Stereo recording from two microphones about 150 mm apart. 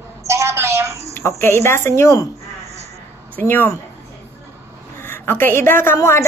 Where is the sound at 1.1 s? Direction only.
15° left (ahead or behind).